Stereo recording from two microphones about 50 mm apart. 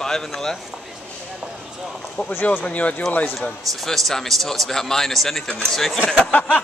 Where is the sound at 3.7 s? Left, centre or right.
Centre.